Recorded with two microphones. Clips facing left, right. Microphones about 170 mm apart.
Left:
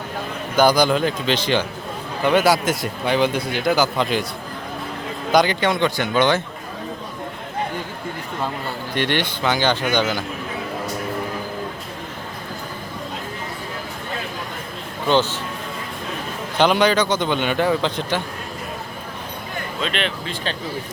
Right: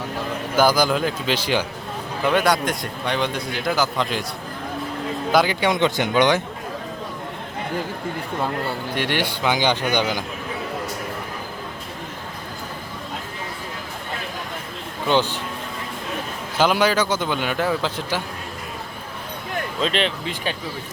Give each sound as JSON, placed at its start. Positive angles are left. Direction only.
{"t": 0.5, "sound": "a man's voice", "side_deg": -5}
{"t": 2.2, "sound": "a man's voice", "side_deg": 5}
{"t": 5.3, "sound": "a man's voice", "side_deg": -5}
{"t": 9.0, "sound": "a man's voice", "side_deg": -10}
{"t": 15.1, "sound": "a man's voice", "side_deg": -15}
{"t": 16.6, "sound": "a man's voice", "side_deg": -5}
{"t": 19.8, "sound": "speech", "side_deg": -35}
{"t": 20.2, "sound": "a man's voice", "side_deg": -15}